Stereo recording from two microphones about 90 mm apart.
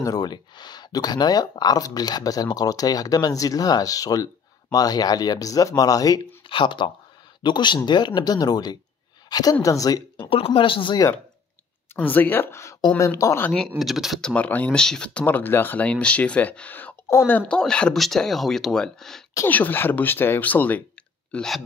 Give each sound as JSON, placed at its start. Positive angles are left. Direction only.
{"t": 0.0, "sound": "speech", "side_deg": 45}
{"t": 6.5, "sound": "a woman's voice", "side_deg": 65}
{"t": 10.3, "sound": "speech", "side_deg": 90}
{"t": 11.9, "sound": "speech", "side_deg": 20}
{"t": 13.5, "sound": "speech", "side_deg": 0}
{"t": 14.2, "sound": "speech", "side_deg": 15}
{"t": 17.6, "sound": "speech", "side_deg": 10}
{"t": 19.4, "sound": "speech", "side_deg": 20}
{"t": 21.3, "sound": "speech", "side_deg": 5}